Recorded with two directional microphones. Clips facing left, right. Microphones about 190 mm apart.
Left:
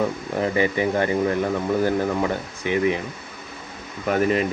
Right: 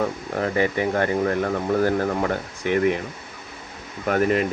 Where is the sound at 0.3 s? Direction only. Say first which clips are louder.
Left 1 dB; 15° left (ahead or behind).